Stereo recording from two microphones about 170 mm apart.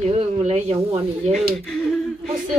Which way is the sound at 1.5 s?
Centre (ahead or behind).